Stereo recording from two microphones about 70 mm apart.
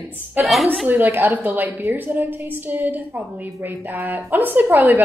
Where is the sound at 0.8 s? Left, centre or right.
Right.